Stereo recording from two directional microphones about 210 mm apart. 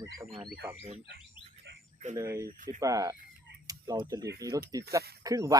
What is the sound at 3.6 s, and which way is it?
Tick-tock, 15° right (ahead or behind).